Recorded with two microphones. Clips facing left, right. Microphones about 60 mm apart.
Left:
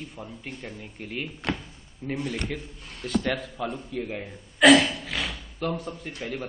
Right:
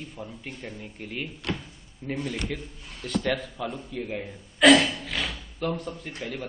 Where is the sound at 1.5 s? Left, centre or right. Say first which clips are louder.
Left 2 dB; left.